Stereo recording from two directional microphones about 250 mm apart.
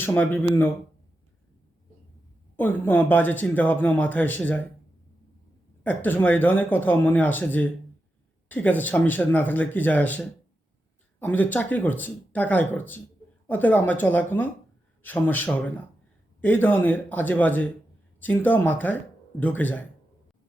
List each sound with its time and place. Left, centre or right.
0.0 s speech: centre
2.6 s speech: centre
5.8 s speech: centre